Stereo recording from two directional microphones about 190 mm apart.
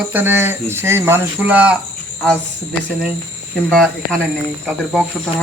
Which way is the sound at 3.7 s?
Centre (ahead or behind).